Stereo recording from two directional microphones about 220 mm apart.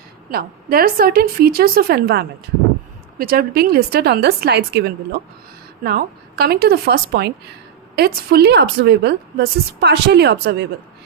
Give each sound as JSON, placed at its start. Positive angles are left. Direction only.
{"t": 0.3, "sound": "a woman's voice", "side_deg": -45}